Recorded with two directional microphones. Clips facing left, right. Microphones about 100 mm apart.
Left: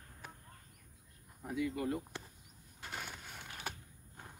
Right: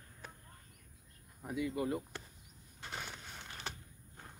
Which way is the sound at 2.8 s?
5° left (ahead or behind).